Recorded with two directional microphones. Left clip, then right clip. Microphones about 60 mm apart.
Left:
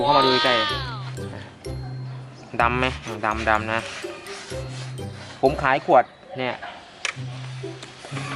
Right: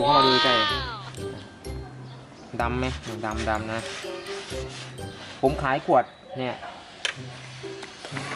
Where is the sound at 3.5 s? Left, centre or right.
Left.